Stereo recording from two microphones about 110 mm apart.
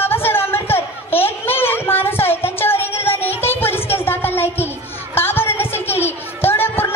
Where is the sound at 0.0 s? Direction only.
20° left (ahead or behind).